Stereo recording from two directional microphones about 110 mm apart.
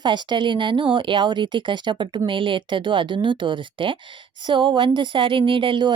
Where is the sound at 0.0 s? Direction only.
45° right (ahead or behind).